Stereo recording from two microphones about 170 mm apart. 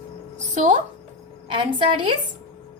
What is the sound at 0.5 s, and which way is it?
Speech, 45° right (ahead or behind).